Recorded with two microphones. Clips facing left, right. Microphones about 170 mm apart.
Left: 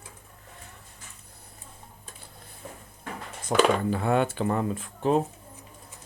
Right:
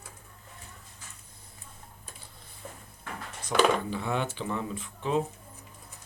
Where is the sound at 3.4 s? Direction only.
50° left (ahead or behind).